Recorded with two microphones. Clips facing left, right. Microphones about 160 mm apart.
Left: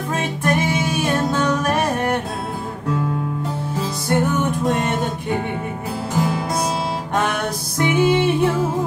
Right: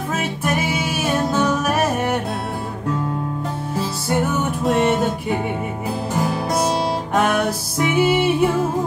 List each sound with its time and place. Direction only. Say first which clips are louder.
0.1 s music: left 2 dB; 5° right (ahead or behind)
4.1 s music: left 2 dB; 5° right (ahead or behind)
7.2 s music: right 3 dB; 5° right (ahead or behind)